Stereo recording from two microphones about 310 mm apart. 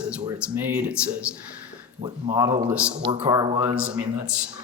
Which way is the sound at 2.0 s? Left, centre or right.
Right.